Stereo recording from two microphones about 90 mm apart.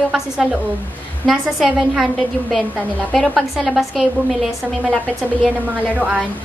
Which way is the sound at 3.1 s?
5° left (ahead or behind).